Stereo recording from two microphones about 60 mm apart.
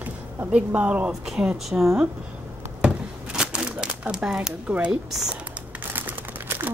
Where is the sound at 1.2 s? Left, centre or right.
Centre.